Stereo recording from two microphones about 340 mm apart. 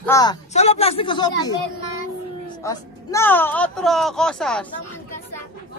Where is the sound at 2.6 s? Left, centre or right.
Centre.